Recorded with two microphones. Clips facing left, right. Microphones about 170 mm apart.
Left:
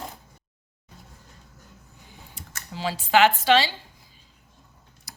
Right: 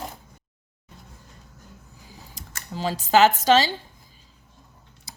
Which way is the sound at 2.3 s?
40° right (ahead or behind).